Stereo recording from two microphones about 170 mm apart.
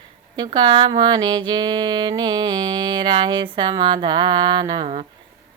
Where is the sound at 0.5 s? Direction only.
30° right (ahead or behind).